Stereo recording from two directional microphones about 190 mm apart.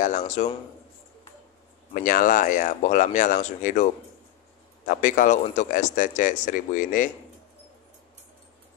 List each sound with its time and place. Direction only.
0.0 s speech: 40° left (ahead or behind)
2.0 s speech: 45° left (ahead or behind)
4.8 s speech: 45° left (ahead or behind)